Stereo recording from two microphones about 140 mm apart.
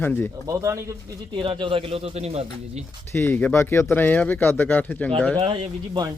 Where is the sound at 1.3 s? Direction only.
35° right (ahead or behind).